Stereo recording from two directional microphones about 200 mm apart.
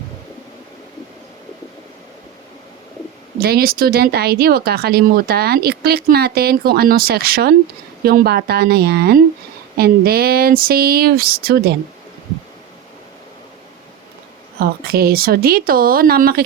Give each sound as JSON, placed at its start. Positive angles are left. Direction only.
{"t": 3.4, "sound": "speech", "side_deg": -50}
{"t": 14.6, "sound": "speech", "side_deg": -50}